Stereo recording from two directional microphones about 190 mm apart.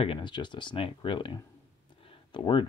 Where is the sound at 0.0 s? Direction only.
25° left (ahead or behind).